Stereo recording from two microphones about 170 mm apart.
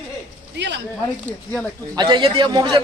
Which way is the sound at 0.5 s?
90° right.